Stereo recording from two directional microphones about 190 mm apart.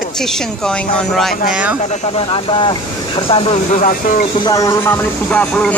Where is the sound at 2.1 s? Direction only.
25° left (ahead or behind).